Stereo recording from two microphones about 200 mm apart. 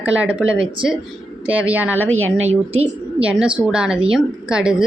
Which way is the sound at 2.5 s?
30° right (ahead or behind).